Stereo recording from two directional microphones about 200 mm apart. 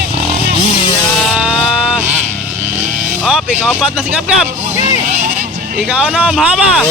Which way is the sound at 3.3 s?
Centre (ahead or behind).